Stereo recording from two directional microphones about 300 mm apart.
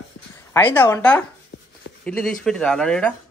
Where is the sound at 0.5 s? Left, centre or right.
Centre.